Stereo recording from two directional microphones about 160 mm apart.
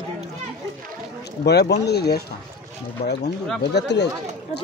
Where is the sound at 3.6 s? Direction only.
90° left.